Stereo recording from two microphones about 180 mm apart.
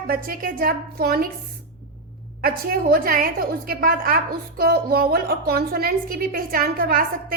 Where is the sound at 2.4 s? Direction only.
55° right (ahead or behind).